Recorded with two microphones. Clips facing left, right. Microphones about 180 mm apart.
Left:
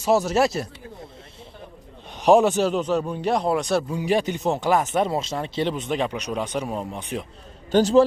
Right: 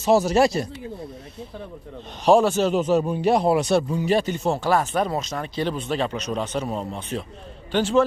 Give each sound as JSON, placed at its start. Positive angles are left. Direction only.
{"t": 0.0, "sound": "speech", "side_deg": 0}
{"t": 2.2, "sound": "speech", "side_deg": 15}
{"t": 2.6, "sound": "speech", "side_deg": -5}
{"t": 3.9, "sound": "speech", "side_deg": 15}
{"t": 7.7, "sound": "a man's voice", "side_deg": 40}